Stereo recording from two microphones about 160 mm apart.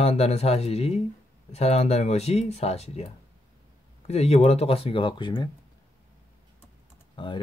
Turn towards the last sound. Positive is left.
turn(degrees=30)  # may be behind; listen again after turning